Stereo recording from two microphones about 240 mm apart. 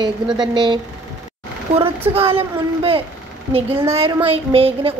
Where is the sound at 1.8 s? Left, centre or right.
Right.